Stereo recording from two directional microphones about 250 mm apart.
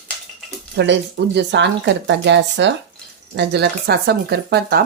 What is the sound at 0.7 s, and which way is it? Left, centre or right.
Speech, right.